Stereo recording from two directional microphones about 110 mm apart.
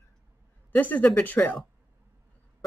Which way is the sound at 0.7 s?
15° left (ahead or behind).